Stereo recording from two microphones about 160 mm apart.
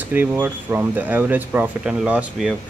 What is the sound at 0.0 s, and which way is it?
Speech, 10° right (ahead or behind).